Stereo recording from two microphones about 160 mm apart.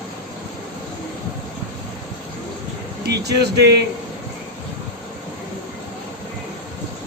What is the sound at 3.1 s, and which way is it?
Speech, 90° right.